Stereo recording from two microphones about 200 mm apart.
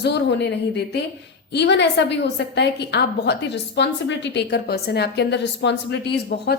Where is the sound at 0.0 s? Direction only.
60° left (ahead or behind).